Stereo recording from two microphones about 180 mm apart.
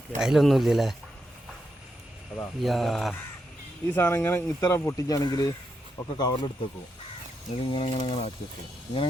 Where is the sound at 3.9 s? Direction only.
10° left (ahead or behind).